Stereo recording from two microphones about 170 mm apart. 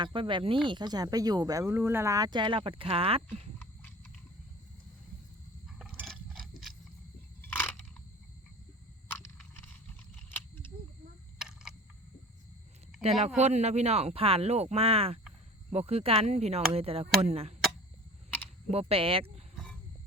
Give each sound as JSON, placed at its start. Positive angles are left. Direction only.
{"t": 0.0, "sound": "speech", "side_deg": -30}
{"t": 5.6, "sound": "liquid", "side_deg": 0}
{"t": 7.4, "sound": "crunch", "side_deg": 10}
{"t": 9.1, "sound": "biting", "side_deg": 15}
{"t": 10.2, "sound": "a sound", "side_deg": 10}
{"t": 13.0, "sound": "speech", "side_deg": -40}
{"t": 18.7, "sound": "speech", "side_deg": -35}